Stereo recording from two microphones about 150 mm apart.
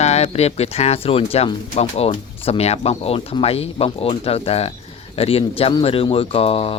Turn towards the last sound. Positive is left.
turn(degrees=40)  # may be behind; listen again after turning